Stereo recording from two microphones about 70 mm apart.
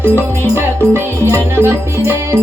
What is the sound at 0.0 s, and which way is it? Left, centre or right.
Music, right.